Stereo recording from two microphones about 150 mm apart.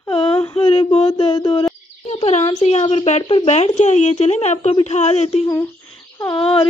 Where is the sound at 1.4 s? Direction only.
30° left (ahead or behind).